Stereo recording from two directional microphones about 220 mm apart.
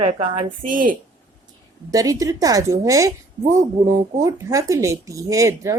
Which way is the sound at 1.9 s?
15° right (ahead or behind).